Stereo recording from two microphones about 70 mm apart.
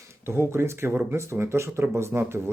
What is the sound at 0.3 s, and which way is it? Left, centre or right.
Speech, right.